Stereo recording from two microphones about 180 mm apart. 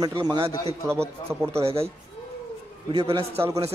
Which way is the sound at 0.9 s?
15° right (ahead or behind).